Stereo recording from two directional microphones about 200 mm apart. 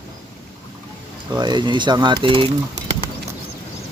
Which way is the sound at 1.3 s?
20° right (ahead or behind).